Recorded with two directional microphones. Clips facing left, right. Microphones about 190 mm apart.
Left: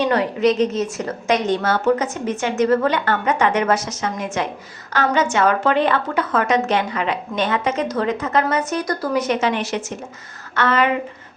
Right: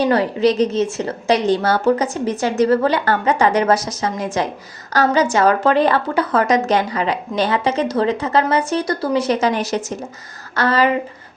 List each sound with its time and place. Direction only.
0.0 s a woman's voice: 35° right (ahead or behind)